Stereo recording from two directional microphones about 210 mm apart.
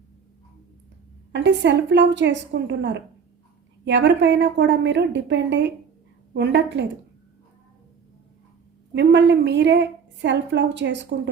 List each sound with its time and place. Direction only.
1.3 s a woman's voice: 60° right (ahead or behind)
8.9 s a woman's voice: 55° right (ahead or behind)